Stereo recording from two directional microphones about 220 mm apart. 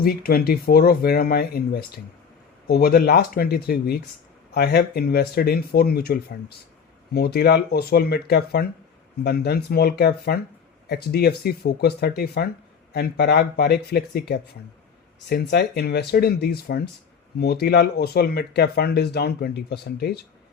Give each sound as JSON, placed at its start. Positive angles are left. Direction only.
{"t": 0.0, "sound": "speech", "side_deg": 45}